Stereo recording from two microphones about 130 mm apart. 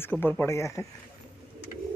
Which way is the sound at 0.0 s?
15° left (ahead or behind).